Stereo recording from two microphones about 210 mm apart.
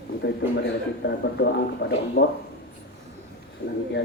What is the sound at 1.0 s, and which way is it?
Speech, 55° left (ahead or behind).